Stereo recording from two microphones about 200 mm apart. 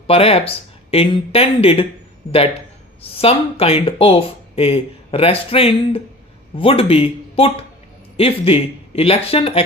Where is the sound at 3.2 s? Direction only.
30° left (ahead or behind).